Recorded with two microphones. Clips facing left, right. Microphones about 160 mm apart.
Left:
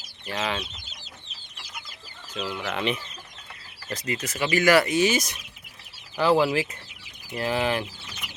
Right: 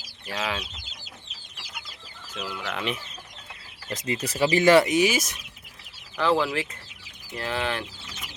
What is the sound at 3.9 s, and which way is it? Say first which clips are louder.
Speech: right 1 dB; 20° right (ahead or behind).